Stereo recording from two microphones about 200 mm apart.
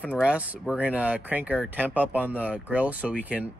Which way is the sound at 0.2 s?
5° right (ahead or behind).